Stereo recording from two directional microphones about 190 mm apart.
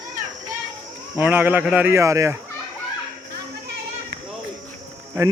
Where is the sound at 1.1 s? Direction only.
10° right (ahead or behind).